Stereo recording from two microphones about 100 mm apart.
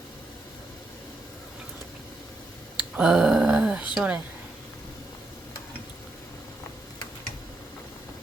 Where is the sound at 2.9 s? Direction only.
5° right (ahead or behind).